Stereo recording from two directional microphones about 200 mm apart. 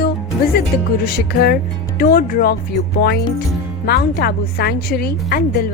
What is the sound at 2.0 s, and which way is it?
Speech, 45° left (ahead or behind).